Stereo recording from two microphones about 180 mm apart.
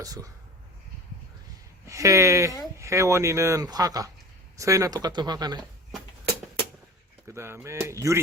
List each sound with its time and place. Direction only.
0.0 s speech: 20° right (ahead or behind)
1.9 s speech: 15° right (ahead or behind)
7.3 s speech: 15° right (ahead or behind)